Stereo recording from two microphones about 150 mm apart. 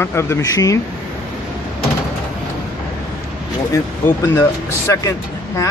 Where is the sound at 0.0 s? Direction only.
15° left (ahead or behind).